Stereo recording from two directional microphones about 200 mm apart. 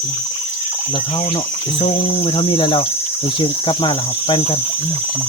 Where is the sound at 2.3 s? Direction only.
25° left (ahead or behind).